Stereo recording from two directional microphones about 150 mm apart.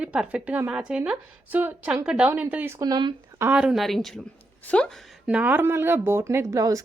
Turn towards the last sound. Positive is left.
turn(degrees=-20)  # may be behind; listen again after turning